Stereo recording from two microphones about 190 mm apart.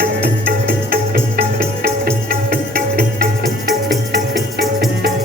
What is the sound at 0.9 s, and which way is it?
Music, 50° right (ahead or behind).